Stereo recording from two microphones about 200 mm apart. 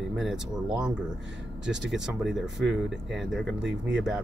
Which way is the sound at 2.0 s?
Centre (ahead or behind).